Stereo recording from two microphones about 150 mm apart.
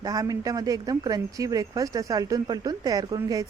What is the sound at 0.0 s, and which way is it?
Speech, 25° right (ahead or behind).